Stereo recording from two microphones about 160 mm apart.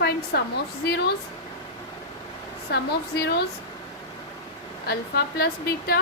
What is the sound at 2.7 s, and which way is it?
Speech, 90° left.